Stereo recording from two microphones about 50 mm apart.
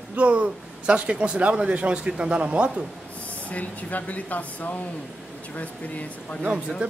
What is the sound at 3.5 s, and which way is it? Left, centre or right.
Speech, left.